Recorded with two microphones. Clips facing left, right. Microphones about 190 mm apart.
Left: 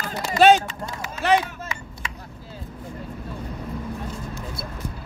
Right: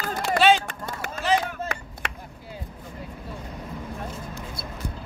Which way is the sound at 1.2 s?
65° left (ahead or behind).